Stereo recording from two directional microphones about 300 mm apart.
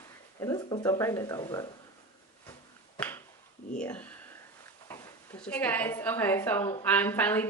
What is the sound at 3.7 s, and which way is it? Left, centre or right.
Speech, centre.